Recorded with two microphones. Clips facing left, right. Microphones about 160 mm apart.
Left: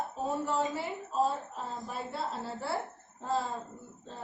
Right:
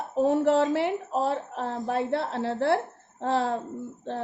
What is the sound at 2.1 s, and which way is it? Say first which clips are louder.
A woman's voice: right 9 dB; 65° right (ahead or behind).